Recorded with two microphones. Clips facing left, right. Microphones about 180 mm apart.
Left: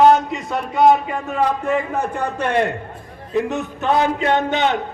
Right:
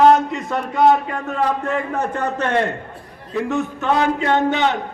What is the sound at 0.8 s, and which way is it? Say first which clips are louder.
A man's voice: left 1 dB; 15° left (ahead or behind).